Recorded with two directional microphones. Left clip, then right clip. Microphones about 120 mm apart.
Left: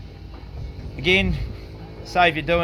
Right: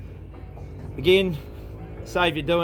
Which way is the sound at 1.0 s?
40° left (ahead or behind).